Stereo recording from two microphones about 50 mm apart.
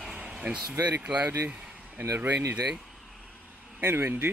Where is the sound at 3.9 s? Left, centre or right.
Right.